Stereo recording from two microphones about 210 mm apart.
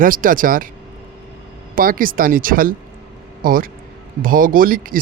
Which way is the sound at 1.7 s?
40° right (ahead or behind).